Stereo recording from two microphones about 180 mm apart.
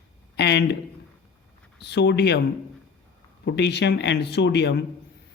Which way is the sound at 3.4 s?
70° left (ahead or behind).